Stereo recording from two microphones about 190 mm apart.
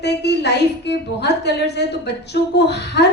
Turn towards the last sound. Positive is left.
turn(degrees=60)  # may be behind; listen again after turning